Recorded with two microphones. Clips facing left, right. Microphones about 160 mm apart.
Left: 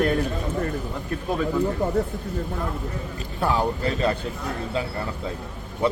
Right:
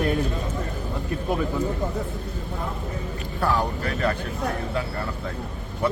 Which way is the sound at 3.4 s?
20° left (ahead or behind).